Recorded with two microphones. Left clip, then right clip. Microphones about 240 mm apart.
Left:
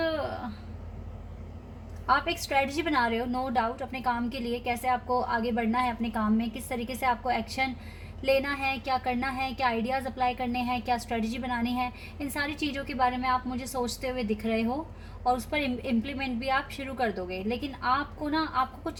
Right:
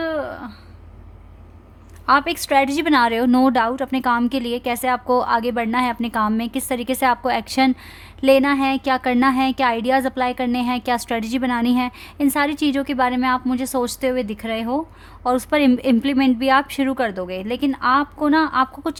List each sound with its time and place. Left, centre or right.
2.0 s speech: right